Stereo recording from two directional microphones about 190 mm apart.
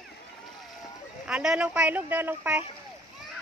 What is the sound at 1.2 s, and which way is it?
Speech, 5° right (ahead or behind).